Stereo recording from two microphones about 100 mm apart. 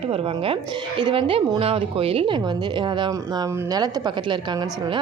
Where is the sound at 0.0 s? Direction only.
75° right (ahead or behind); by 3.1 s 50° right (ahead or behind).